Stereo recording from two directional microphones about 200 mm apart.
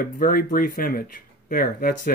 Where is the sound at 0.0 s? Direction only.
45° left (ahead or behind).